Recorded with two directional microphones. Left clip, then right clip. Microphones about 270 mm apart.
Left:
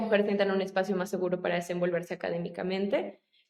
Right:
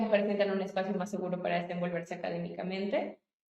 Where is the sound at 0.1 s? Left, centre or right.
Left.